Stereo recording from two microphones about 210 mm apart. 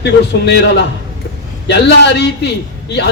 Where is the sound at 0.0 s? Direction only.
55° left (ahead or behind).